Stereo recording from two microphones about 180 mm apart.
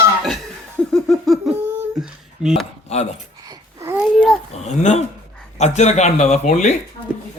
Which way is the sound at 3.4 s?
15° right (ahead or behind).